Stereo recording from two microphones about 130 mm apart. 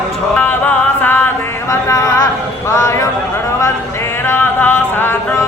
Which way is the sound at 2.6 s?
20° left (ahead or behind).